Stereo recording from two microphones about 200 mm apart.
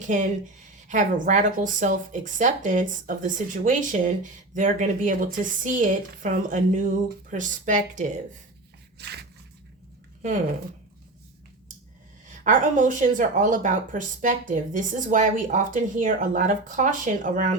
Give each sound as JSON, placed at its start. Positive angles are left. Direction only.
{"t": 0.9, "sound": "speech", "side_deg": -40}
{"t": 9.0, "sound": "a sound", "side_deg": -55}
{"t": 12.3, "sound": "speech", "side_deg": -40}